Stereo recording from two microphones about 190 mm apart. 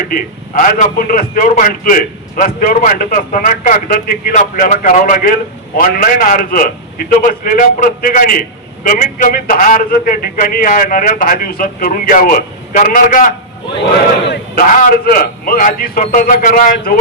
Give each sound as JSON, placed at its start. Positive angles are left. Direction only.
{"t": 0.1, "sound": "a man's voice", "side_deg": 45}